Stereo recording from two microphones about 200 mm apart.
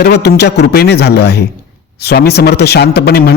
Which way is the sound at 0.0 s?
55° left (ahead or behind).